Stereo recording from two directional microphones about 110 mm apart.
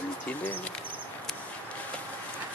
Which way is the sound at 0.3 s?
15° left (ahead or behind).